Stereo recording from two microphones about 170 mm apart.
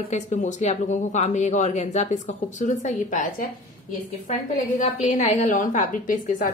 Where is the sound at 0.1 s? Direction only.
45° left (ahead or behind).